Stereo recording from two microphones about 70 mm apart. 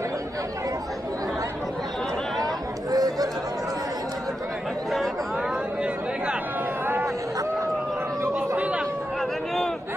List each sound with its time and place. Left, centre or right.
2.4 s chatter: right
8.4 s chatter: centre